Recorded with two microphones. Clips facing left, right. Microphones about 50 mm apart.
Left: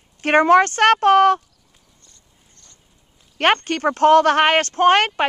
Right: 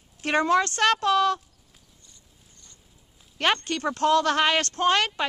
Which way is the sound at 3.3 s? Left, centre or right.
Left.